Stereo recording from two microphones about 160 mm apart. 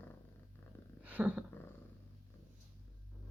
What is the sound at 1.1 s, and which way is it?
Purr, 10° right (ahead or behind).